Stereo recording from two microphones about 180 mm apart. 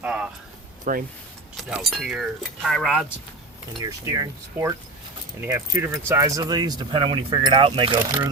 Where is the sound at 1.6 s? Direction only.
5° right (ahead or behind).